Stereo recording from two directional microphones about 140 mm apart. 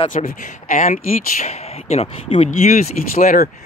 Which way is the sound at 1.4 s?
50° left (ahead or behind).